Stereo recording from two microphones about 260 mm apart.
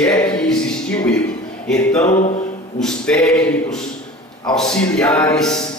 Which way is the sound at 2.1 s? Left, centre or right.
Left.